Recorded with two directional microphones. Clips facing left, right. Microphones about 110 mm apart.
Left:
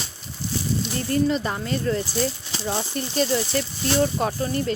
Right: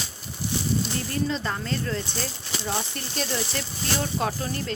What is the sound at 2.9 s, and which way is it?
Speech, 5° left (ahead or behind).